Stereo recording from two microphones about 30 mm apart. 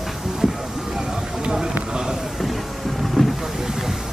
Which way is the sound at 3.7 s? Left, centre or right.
Centre.